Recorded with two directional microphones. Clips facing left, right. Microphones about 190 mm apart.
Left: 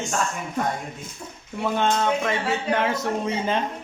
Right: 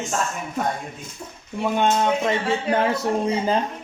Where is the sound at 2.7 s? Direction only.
30° right (ahead or behind).